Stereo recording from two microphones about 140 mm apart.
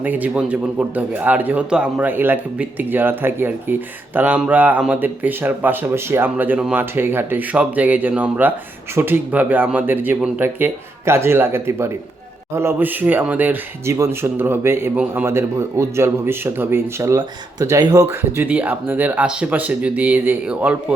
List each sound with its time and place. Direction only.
0.0 s a man's voice: 10° right (ahead or behind); by 18.0 s 25° right (ahead or behind)
18.1 s a man's voice: 15° right (ahead or behind)